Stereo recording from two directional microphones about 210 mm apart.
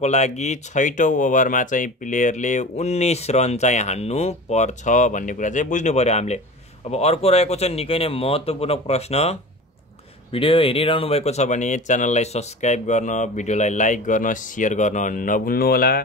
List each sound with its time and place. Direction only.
0.0 s speech: 30° left (ahead or behind)